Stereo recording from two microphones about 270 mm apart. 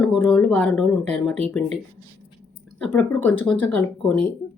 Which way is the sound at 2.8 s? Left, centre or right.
Centre.